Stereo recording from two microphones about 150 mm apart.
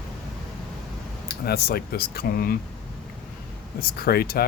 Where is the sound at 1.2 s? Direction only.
90° left.